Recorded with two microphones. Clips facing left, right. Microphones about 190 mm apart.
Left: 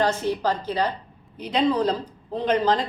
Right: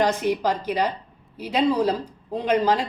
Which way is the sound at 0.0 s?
15° right (ahead or behind).